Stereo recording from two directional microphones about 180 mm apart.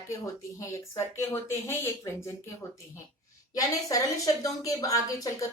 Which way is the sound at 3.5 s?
20° left (ahead or behind).